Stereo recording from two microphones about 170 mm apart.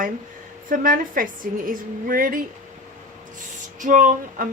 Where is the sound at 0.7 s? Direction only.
55° right (ahead or behind).